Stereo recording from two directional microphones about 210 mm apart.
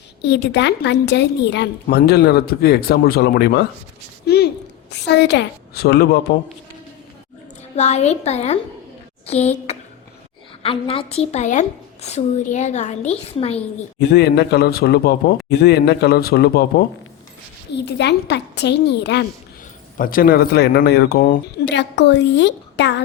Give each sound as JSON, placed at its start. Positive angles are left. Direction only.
{"t": 0.2, "sound": "a woman's voice", "side_deg": 55}
{"t": 7.8, "sound": "a woman's voice", "side_deg": 30}
{"t": 14.1, "sound": "a woman's voice", "side_deg": 50}